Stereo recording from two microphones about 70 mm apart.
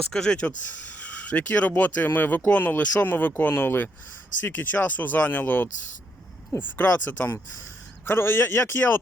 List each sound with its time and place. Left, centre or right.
0.0 s speech: centre; by 9.0 s left